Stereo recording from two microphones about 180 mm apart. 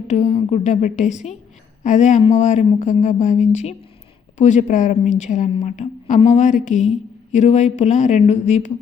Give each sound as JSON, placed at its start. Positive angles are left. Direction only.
{"t": 0.1, "sound": "a woman's voice", "side_deg": 40}